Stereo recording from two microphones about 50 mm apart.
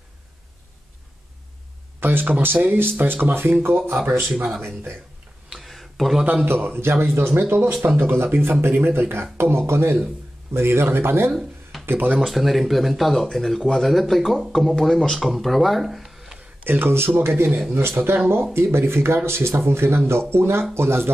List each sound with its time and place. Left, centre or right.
2.0 s a man's voice: right
4.2 s speech: centre
5.6 s a sound: centre
6.4 s a man's voice: right
12.2 s speech: centre
16.6 s a man's voice: right
17.5 s speech: centre
17.7 s speech: right